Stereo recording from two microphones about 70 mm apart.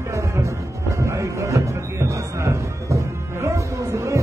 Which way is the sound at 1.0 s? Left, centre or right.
Right.